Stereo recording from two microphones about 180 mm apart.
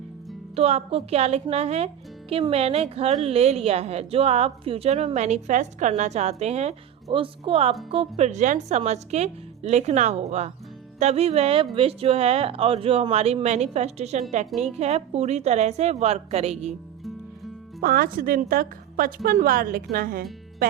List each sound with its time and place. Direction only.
0.5 s speech: 35° right (ahead or behind)
17.7 s a woman's voice: 55° right (ahead or behind)